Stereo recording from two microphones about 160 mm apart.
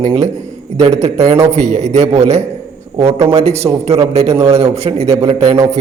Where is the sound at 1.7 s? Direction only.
45° right (ahead or behind).